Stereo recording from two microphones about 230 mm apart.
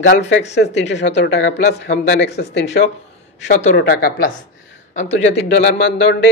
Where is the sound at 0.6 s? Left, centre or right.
Left.